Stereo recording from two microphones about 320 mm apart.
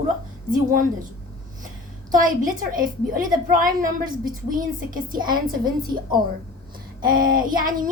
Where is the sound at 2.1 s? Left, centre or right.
Right.